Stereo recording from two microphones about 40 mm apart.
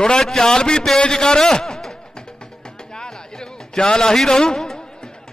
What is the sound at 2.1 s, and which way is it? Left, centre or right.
Music, centre.